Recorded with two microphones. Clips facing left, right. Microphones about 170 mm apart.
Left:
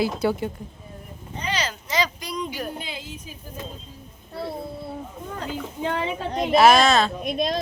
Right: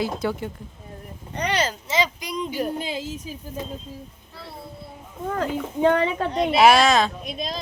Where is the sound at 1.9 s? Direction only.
25° right (ahead or behind).